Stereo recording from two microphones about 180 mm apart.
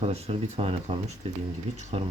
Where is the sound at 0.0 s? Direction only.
35° right (ahead or behind).